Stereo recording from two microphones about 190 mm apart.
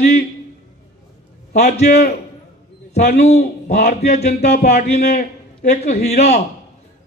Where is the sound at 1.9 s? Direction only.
60° left (ahead or behind).